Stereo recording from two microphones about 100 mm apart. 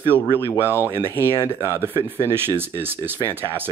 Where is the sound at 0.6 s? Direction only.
20° right (ahead or behind).